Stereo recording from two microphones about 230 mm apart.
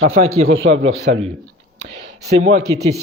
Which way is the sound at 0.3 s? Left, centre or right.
Right.